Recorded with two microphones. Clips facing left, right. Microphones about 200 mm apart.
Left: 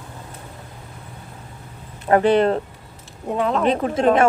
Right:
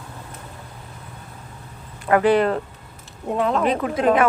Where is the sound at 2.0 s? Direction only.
30° left (ahead or behind).